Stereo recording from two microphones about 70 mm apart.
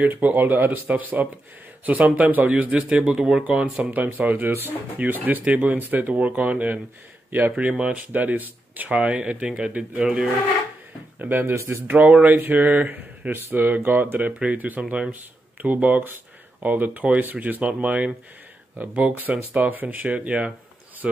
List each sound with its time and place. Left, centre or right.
0.0 s speech: right
11.1 s speech: right
11.9 s speech: centre